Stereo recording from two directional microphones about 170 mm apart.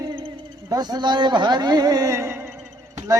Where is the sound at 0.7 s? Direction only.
25° right (ahead or behind).